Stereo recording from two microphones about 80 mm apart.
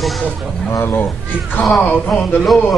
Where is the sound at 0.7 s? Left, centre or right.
Left.